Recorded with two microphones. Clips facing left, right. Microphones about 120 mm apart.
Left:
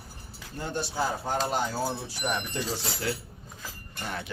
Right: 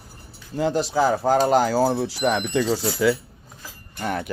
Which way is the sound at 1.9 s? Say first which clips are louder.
Right 10 dB; 75° right (ahead or behind).